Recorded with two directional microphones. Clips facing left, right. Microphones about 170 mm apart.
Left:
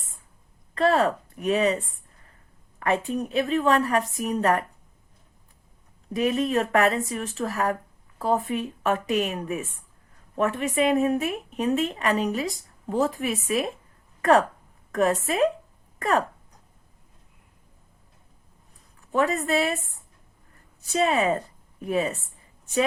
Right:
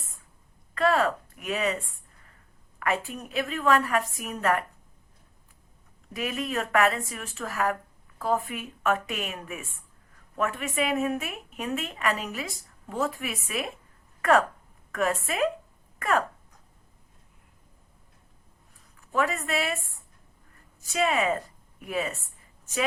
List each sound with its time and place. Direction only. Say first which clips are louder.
0.7 s a woman's voice: left 3 dB; 35° left (ahead or behind)
6.1 s a woman's voice: left 7 dB; 35° left (ahead or behind)
19.1 s a woman's voice: left 4 dB; 40° left (ahead or behind)
21.0 s a woman's voice: left 3 dB; 35° left (ahead or behind)